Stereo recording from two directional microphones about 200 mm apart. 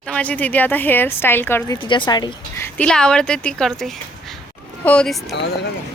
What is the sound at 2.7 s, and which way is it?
Speech, 5° left (ahead or behind).